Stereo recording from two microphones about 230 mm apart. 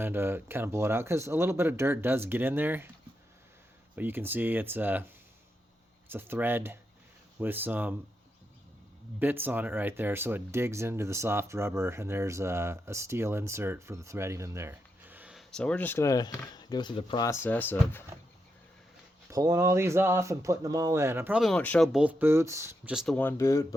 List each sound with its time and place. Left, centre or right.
0.0 s speech: centre
3.9 s speech: centre
9.1 s speech: centre
19.3 s speech: centre